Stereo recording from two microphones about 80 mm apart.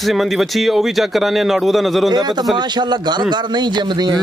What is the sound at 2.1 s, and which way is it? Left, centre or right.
A man's voice, right.